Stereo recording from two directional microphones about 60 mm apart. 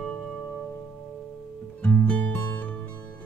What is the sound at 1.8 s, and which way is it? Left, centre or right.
Music, left.